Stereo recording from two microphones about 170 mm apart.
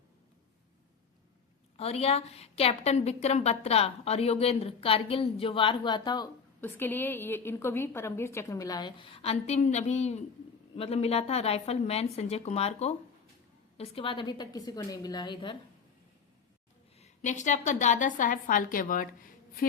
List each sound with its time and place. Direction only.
1.7 s a woman's voice: 35° left (ahead or behind)
6.6 s a woman's voice: 10° left (ahead or behind); by 15.5 s 30° left (ahead or behind)
17.0 s a woman's voice: 45° left (ahead or behind)